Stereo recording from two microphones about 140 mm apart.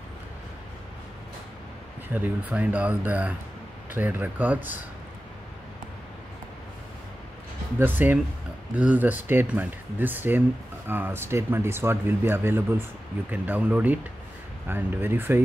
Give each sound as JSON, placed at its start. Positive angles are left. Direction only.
{"t": 2.1, "sound": "speech", "side_deg": -10}
{"t": 7.8, "sound": "speech", "side_deg": -15}